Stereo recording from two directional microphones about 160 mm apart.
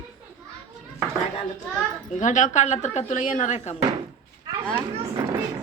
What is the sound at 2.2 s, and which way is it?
A woman's voice, 50° left (ahead or behind).